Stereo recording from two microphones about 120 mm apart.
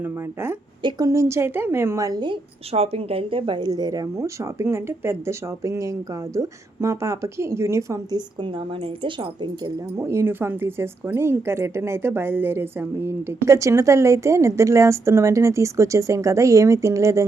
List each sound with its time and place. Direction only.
0.8 s speech: 35° right (ahead or behind)
2.7 s speech: 55° right (ahead or behind); by 8.2 s 25° right (ahead or behind)
10.0 s speech: 20° right (ahead or behind)